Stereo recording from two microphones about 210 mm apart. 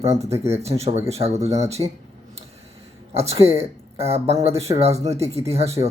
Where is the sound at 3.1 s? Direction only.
30° right (ahead or behind).